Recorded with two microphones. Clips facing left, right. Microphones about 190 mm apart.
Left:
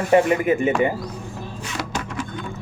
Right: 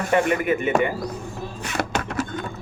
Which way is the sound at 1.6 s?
60° right (ahead or behind).